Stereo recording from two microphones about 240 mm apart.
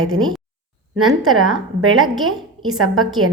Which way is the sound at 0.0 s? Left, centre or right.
Right.